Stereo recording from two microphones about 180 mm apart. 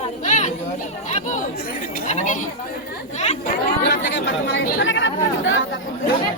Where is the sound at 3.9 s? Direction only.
85° left.